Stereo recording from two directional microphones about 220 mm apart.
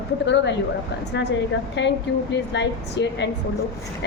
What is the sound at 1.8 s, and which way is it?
A woman's voice, 50° left (ahead or behind).